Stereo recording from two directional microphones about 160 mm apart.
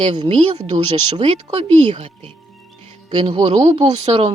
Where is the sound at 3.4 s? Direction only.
40° right (ahead or behind).